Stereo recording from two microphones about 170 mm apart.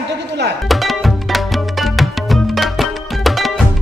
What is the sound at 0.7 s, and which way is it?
Music, centre (ahead or behind).